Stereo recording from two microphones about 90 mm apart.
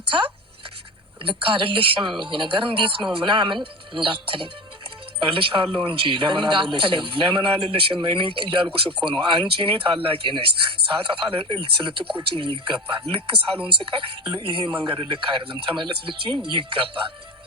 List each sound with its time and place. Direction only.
1.2 s a man's voice: 80° right
12.2 s a man's voice: 90° right